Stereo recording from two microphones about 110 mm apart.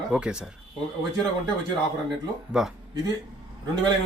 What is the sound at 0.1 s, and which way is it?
Speech, 10° right (ahead or behind).